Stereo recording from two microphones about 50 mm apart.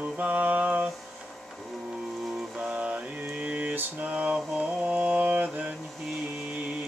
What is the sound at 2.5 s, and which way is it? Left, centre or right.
Mantra, right.